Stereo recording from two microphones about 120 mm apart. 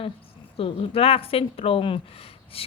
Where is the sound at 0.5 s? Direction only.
50° left (ahead or behind).